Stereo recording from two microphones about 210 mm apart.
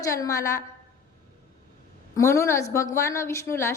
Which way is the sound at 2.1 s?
15° left (ahead or behind).